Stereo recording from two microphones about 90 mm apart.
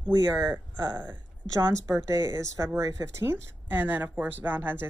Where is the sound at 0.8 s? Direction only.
50° right (ahead or behind).